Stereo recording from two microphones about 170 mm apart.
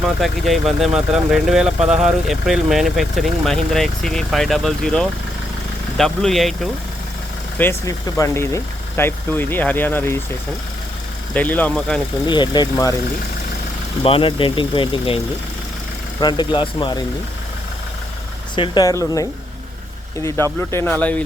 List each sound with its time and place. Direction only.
0.0 s speech: centre (ahead or behind)
7.6 s speech: 15° left (ahead or behind)
11.3 s speech: 10° left (ahead or behind)
12.2 s speech: 25° left (ahead or behind)
14.0 s speech: 30° left (ahead or behind)
16.2 s speech: 25° left (ahead or behind)
18.5 s speech: 25° left (ahead or behind); by 21.2 s 10° left (ahead or behind)